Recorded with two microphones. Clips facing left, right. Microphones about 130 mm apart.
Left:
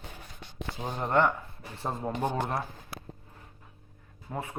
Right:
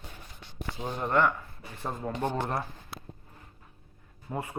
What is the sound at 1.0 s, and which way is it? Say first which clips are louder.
Speech: left 1 dB; 25° left (ahead or behind).